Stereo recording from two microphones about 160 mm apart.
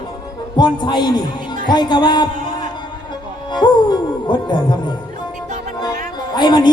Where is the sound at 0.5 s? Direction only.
25° left (ahead or behind).